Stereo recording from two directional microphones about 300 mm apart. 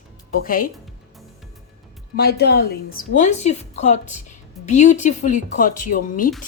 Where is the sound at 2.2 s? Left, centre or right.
Left.